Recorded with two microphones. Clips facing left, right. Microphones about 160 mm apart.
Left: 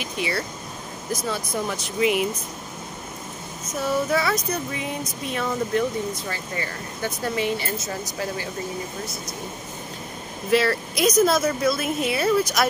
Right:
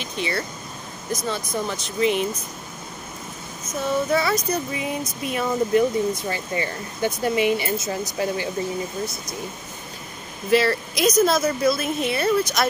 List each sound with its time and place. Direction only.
0.0 s speech: 5° left (ahead or behind)
3.8 s a woman's voice: centre (ahead or behind)
6.2 s speech: 20° right (ahead or behind)
10.5 s a woman's voice: centre (ahead or behind)